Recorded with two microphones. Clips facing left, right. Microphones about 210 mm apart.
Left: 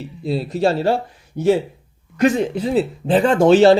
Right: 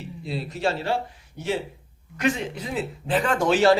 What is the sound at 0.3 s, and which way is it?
Speech, 35° left (ahead or behind).